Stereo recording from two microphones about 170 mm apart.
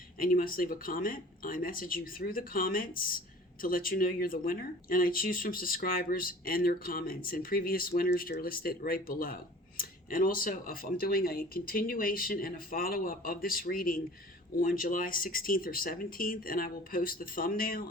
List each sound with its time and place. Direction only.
0.2 s speech: 55° left (ahead or behind)